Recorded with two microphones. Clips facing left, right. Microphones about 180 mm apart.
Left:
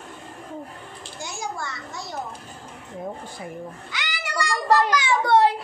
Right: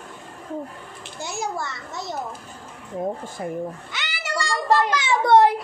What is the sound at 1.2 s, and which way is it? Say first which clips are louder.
Speech: right 4 dB; 20° right (ahead or behind).